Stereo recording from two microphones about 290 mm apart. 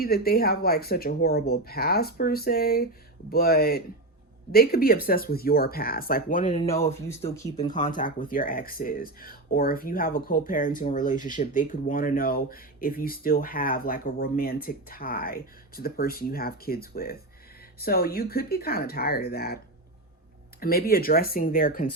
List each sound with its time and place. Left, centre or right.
0.0 s speech: left
20.6 s speech: left